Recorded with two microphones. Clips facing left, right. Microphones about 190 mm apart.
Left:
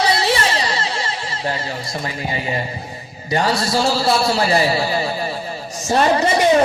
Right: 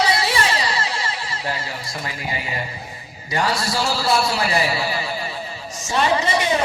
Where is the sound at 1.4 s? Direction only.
25° left (ahead or behind); by 6.3 s 45° left (ahead or behind).